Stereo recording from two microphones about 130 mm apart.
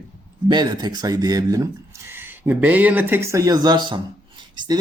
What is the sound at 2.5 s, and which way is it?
Speech, 10° right (ahead or behind).